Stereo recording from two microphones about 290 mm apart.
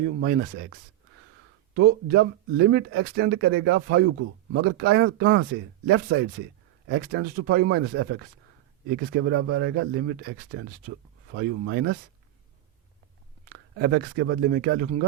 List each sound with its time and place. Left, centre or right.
0.0 s speech: right
2.0 s speech: right
13.4 s speech: right